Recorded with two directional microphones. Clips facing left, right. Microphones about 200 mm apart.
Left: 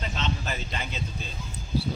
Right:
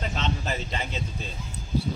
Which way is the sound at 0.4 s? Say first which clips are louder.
Right 3 dB; 25° right (ahead or behind).